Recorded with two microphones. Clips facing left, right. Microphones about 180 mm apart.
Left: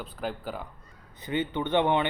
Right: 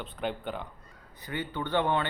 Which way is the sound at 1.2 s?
20° left (ahead or behind).